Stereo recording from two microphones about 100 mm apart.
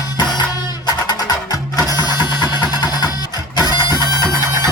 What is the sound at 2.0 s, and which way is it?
Music, 45° left (ahead or behind).